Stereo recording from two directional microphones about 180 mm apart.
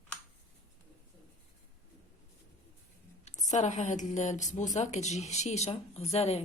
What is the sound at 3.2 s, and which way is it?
A woman's voice, 40° left (ahead or behind).